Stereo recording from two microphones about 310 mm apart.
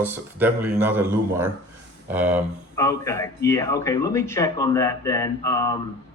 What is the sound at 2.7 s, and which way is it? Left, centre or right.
Speech, centre.